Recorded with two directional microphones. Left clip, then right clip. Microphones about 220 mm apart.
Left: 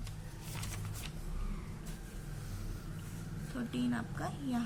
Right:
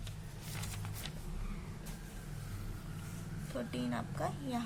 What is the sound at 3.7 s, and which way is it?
Speech, 35° right (ahead or behind).